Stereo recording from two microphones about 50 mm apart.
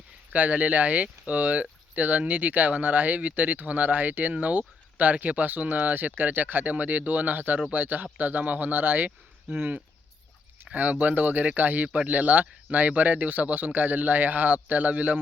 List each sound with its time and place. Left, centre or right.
0.3 s speech: right